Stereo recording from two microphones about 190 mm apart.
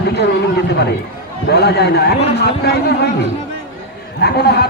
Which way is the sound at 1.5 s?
60° left (ahead or behind).